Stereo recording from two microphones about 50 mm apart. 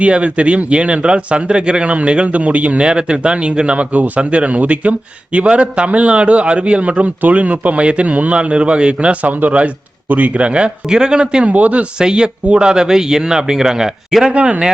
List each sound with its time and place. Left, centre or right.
0.0 s speech: right
11.9 s speech: centre
14.3 s speech: right